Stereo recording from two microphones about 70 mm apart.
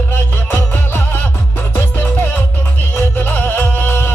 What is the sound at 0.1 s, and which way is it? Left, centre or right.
Music, left.